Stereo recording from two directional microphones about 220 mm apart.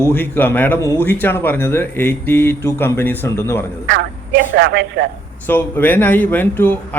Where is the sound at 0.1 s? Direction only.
10° left (ahead or behind).